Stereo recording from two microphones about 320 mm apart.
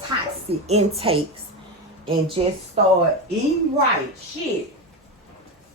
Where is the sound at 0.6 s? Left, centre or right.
Centre.